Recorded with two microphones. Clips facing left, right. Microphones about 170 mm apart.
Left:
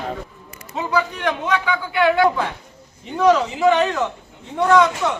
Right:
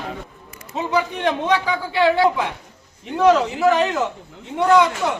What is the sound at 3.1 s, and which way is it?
Speech, 5° right (ahead or behind).